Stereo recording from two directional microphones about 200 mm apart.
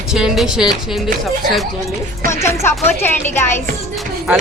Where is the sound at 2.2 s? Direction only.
15° left (ahead or behind).